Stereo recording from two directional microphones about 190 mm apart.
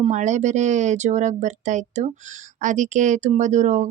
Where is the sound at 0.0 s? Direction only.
40° right (ahead or behind).